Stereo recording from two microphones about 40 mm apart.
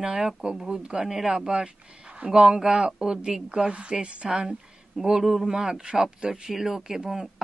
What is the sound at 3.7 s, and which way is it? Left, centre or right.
Speech, right.